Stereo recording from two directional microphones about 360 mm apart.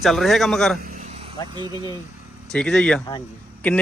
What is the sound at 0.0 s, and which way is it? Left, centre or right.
Speech, centre.